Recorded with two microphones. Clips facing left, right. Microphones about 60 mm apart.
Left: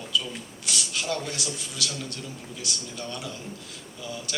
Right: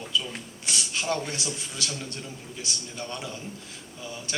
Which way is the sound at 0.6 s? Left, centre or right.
Right.